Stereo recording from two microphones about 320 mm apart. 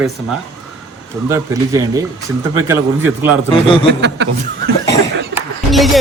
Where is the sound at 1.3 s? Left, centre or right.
Centre.